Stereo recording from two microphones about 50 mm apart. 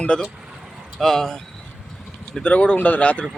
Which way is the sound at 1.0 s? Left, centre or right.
Centre.